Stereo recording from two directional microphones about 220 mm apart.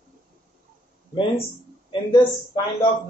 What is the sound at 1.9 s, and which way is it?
Speech, 20° left (ahead or behind).